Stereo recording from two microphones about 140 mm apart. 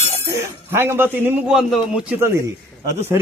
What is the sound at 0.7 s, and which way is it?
Speech, 20° right (ahead or behind).